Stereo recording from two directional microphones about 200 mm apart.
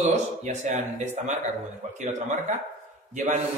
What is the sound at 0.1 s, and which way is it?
A man's voice, 35° right (ahead or behind).